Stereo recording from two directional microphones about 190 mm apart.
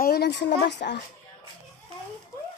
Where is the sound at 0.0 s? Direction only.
55° left (ahead or behind).